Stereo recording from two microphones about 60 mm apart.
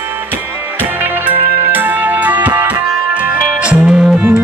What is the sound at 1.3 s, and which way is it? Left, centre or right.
Music, right.